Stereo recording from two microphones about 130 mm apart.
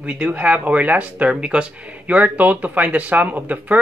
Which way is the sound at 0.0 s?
10° right (ahead or behind).